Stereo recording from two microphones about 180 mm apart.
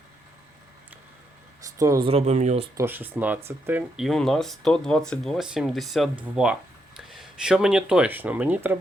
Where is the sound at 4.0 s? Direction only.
Centre (ahead or behind).